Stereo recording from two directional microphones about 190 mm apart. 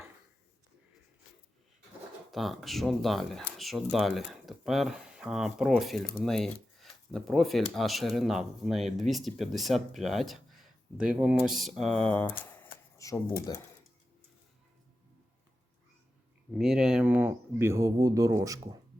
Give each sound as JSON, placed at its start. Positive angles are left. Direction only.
{"t": 2.3, "sound": "speech", "side_deg": 0}
{"t": 16.6, "sound": "speech", "side_deg": -5}